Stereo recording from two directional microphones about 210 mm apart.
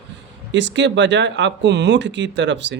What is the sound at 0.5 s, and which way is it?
Speech, 60° right (ahead or behind).